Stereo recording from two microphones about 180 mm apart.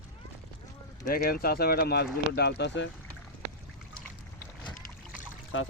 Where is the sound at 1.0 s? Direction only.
55° left (ahead or behind); by 2.9 s 75° left (ahead or behind).